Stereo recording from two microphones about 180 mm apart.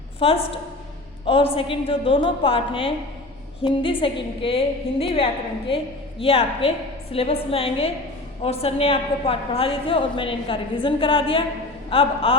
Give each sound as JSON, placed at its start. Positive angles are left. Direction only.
{"t": 0.2, "sound": "a woman's voice", "side_deg": 30}